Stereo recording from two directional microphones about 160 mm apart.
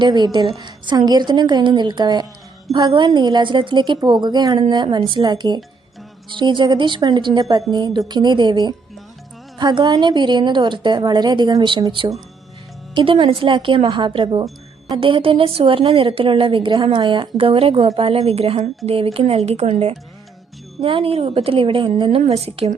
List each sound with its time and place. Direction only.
0.0 s a woman's voice: 30° right (ahead or behind)